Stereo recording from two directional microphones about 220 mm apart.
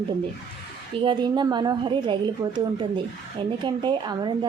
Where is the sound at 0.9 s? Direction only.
20° right (ahead or behind).